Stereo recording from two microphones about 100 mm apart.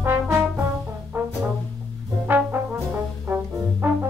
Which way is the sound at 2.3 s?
20° right (ahead or behind).